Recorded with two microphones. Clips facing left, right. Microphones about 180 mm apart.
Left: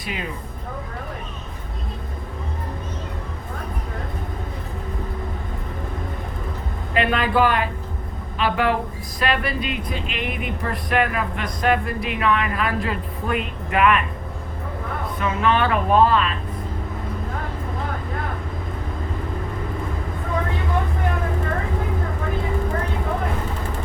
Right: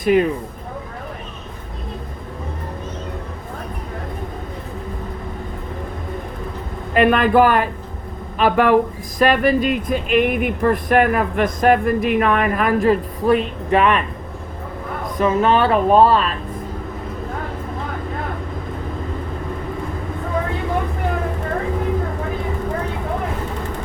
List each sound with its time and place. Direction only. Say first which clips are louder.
0.0 s speech: right 16 dB; 50° right (ahead or behind)
6.9 s speech: right 6 dB; 50° right (ahead or behind); by 14.0 s 30° right (ahead or behind)
15.2 s speech: right 5 dB; 35° right (ahead or behind)